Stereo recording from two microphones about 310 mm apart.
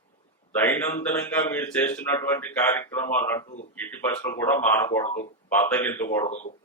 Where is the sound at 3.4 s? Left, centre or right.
Left.